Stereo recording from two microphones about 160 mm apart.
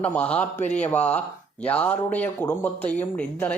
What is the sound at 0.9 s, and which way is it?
A woman's voice, 10° left (ahead or behind).